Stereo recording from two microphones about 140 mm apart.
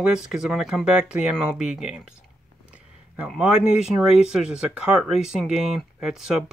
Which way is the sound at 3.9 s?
5° right (ahead or behind).